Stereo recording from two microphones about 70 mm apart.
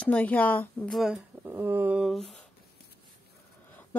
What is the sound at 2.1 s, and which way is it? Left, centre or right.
Speech, centre.